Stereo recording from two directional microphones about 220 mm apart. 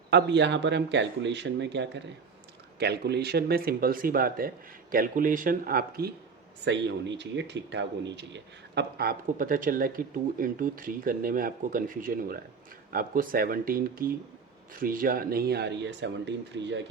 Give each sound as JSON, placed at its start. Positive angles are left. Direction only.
{"t": 0.1, "sound": "speech", "side_deg": -50}